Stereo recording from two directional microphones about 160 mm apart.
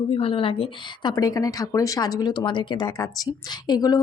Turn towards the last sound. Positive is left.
turn(degrees=25)  # may be behind; listen again after turning